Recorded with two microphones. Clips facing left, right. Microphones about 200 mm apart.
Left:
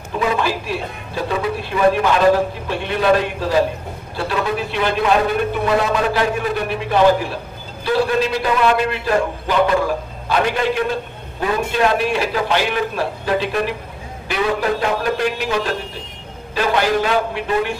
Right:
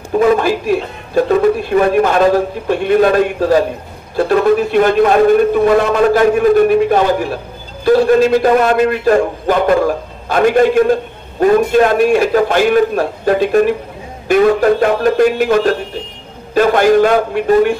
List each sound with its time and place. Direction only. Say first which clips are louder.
0.2 s a man's voice: right 8 dB; 50° right (ahead or behind)